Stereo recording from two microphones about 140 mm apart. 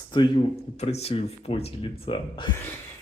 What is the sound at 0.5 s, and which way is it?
Speech, 50° left (ahead or behind).